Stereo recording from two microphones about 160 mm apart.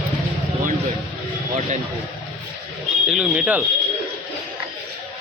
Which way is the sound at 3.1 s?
5° right (ahead or behind).